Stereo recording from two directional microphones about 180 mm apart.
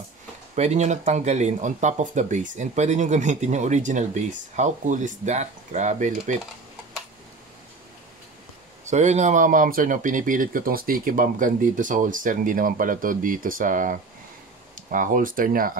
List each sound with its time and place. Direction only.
0.6 s speech: 40° right (ahead or behind)
8.8 s speech: 40° right (ahead or behind)